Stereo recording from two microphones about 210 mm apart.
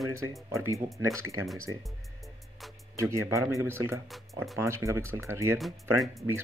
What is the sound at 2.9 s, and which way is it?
Speech, 15° right (ahead or behind).